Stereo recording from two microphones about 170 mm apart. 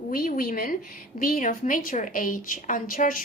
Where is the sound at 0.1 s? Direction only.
55° left (ahead or behind).